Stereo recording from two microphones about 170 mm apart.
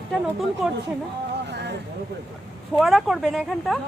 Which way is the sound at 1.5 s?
85° right.